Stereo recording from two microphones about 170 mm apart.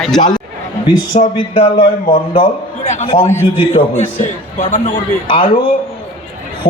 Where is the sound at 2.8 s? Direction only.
45° left (ahead or behind).